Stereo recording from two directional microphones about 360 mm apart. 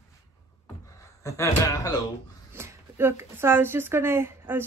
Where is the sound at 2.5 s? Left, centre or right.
Centre.